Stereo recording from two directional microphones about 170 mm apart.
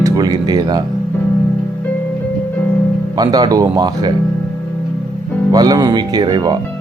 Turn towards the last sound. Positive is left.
turn(degrees=-25)  # may be behind; listen again after turning